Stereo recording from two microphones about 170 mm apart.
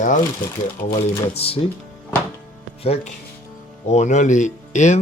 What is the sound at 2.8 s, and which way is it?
Speech, 35° left (ahead or behind).